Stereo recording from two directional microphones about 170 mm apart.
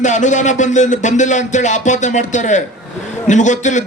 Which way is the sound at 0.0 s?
45° left (ahead or behind).